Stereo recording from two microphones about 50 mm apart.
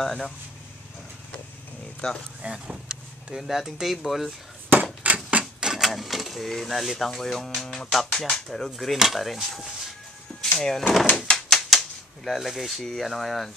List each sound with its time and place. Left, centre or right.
0.0 s speech: centre
2.0 s speech: centre
2.4 s speech: centre
5.0 s typewriter: right
5.6 s printer: centre
5.9 s speech: centre
8.9 s speech: centre
10.6 s speech: centre
11.3 s typewriter: centre
12.3 s speech: centre